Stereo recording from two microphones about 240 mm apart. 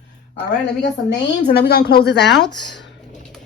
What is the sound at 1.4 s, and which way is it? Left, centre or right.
A woman's voice, left.